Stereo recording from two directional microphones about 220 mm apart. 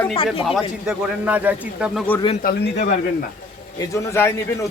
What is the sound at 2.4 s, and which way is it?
Speech, 45° left (ahead or behind).